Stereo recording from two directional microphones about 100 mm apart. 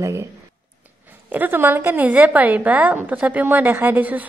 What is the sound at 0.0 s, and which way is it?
Speech, 30° right (ahead or behind).